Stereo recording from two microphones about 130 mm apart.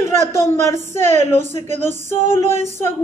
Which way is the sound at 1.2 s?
65° right (ahead or behind).